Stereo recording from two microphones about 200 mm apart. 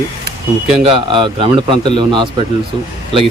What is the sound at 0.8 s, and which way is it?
A man's voice, 25° right (ahead or behind).